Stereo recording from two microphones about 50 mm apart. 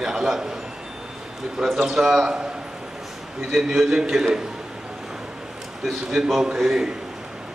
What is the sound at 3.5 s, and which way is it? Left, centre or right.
Speech, centre.